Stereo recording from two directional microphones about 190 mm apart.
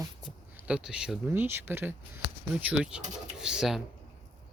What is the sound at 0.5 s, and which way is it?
A woman's voice, 5° right (ahead or behind).